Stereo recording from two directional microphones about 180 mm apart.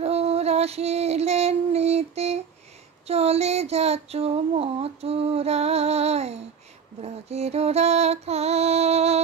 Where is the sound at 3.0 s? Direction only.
35° right (ahead or behind).